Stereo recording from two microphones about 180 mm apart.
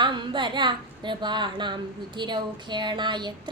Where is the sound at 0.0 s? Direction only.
25° right (ahead or behind).